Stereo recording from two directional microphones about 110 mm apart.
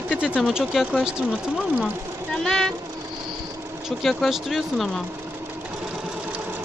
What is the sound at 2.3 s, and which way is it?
Speech, 5° left (ahead or behind).